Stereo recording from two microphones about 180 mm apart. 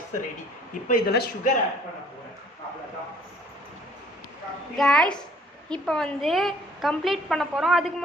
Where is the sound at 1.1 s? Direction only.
60° left (ahead or behind).